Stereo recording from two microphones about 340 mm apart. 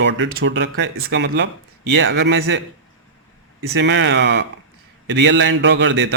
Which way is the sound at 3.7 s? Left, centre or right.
Right.